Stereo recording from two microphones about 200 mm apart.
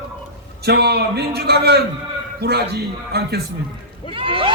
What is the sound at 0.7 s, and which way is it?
A man's voice, 55° right (ahead or behind).